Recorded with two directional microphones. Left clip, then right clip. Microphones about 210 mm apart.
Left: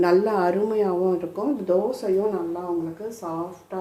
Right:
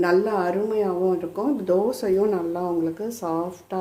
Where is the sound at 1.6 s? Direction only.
25° right (ahead or behind).